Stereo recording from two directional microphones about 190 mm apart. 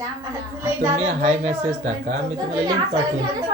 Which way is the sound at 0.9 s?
35° right (ahead or behind).